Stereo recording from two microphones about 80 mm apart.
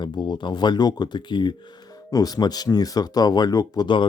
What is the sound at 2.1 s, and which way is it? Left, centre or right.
Speech, left.